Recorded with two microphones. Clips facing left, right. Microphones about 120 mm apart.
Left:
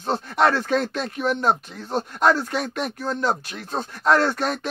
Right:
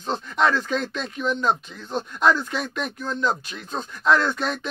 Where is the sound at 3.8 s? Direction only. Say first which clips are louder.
Left 2 dB; 65° left (ahead or behind).